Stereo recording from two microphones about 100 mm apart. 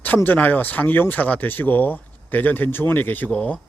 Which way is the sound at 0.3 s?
15° left (ahead or behind).